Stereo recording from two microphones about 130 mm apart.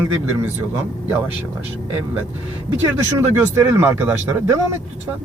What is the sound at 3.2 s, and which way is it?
Speech, 20° right (ahead or behind).